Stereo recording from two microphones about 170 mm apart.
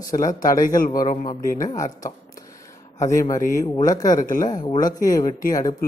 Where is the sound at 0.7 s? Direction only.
55° left (ahead or behind).